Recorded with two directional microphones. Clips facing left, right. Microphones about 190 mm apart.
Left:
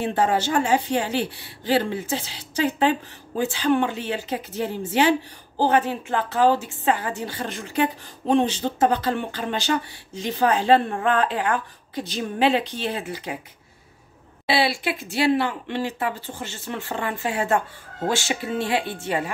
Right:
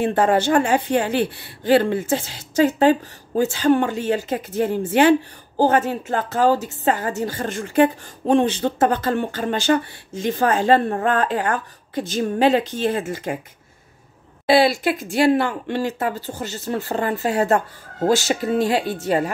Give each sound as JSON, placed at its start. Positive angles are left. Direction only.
{"t": 0.0, "sound": "a woman's voice", "side_deg": -55}
{"t": 14.4, "sound": "a woman's voice", "side_deg": -45}